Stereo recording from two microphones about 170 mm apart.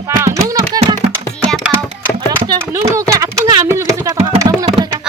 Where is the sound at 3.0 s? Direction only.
20° right (ahead or behind).